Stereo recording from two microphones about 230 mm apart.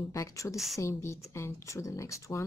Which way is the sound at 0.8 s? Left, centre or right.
Centre.